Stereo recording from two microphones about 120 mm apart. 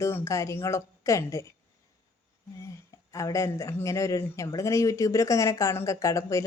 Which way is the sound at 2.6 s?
25° left (ahead or behind).